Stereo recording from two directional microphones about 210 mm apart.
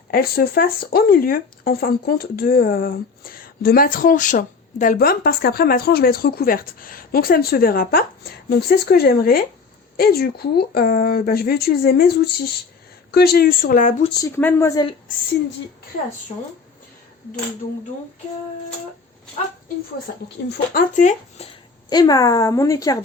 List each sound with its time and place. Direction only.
0.1 s speech: 45° left (ahead or behind)
14.2 s a woman's voice: 10° left (ahead or behind)
20.5 s speech: 40° left (ahead or behind)
21.8 s a woman's voice: 20° left (ahead or behind)